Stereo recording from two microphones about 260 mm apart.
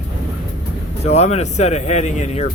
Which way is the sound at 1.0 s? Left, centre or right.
Left.